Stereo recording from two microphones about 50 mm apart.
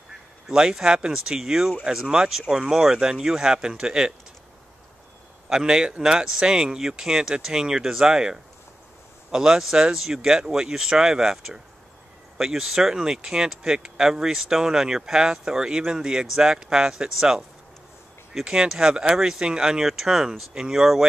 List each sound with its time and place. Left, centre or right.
0.5 s speech: centre
5.5 s speech: centre